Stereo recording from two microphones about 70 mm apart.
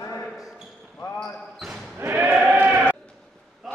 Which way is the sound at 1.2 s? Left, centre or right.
Centre.